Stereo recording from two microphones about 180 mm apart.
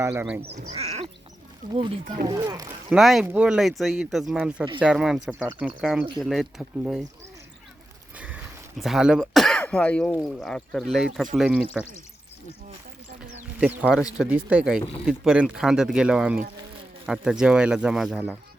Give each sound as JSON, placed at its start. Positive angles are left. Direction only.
{"t": 0.0, "sound": "speech", "side_deg": -15}
{"t": 0.4, "sound": "speech", "side_deg": -35}
{"t": 1.7, "sound": "speech", "side_deg": -25}
{"t": 2.9, "sound": "speech", "side_deg": 0}
{"t": 8.1, "sound": "a sound", "side_deg": -10}
{"t": 8.8, "sound": "speech", "side_deg": 0}
{"t": 13.8, "sound": "speech", "side_deg": 0}